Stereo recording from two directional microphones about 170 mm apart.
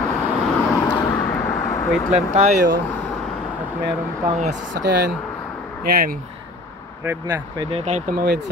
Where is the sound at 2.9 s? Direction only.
10° left (ahead or behind).